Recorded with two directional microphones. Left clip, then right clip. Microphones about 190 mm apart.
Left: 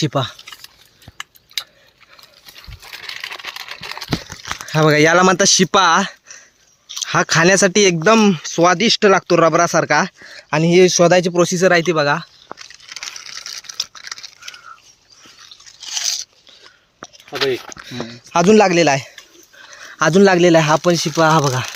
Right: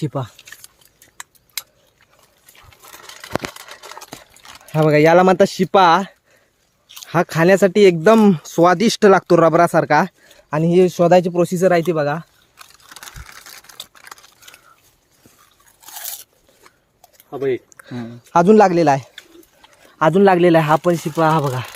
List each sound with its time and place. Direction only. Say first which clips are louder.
0.0 s speech: left 6 dB; centre (ahead or behind)
3.1 s a sound: right 2 dB; 25° right (ahead or behind)
4.7 s speech: even; centre (ahead or behind)
8.0 s speech: even; 15° right (ahead or behind)
10.5 s speech: left 3 dB; centre (ahead or behind)
12.5 s a sound: left 4 dB; 55° right (ahead or behind)
18.3 s speech: right 1 dB; 5° right (ahead or behind)
20.0 s speech: left 1 dB; 10° left (ahead or behind)